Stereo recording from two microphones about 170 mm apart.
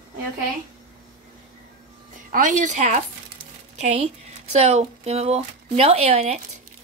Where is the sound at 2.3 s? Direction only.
45° right (ahead or behind).